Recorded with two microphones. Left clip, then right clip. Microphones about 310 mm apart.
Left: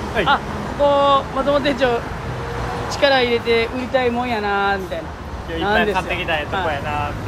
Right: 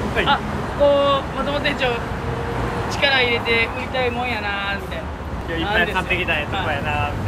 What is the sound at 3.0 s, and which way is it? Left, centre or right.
Speech, centre.